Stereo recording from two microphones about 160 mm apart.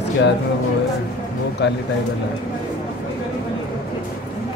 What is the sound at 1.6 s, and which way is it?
Speech, 90° left.